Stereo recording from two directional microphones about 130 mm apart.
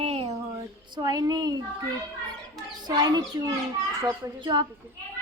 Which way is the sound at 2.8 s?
30° right (ahead or behind).